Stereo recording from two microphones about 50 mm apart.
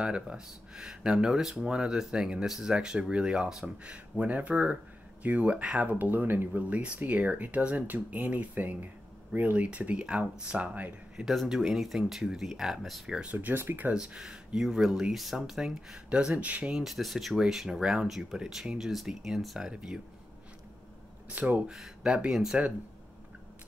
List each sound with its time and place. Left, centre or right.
0.0 s speech: centre
3.6 s speech: right
6.6 s speech: right
9.7 s speech: right
11.1 s speech: centre
13.2 s speech: right
13.9 s speech: centre
16.1 s speech: right
16.7 s speech: centre
21.4 s speech: right
22.0 s speech: centre